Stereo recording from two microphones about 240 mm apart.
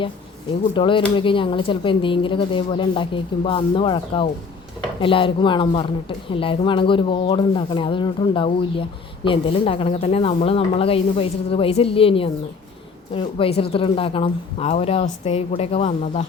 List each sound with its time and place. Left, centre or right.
0.7 s a woman's voice: left